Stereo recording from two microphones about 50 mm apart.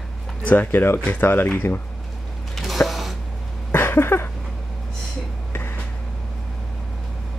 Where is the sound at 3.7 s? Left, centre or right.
Left.